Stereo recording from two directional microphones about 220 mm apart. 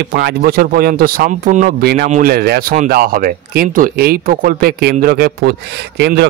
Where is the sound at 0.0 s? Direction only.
45° right (ahead or behind).